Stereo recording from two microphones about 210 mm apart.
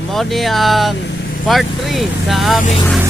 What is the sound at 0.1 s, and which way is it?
Speech, centre (ahead or behind).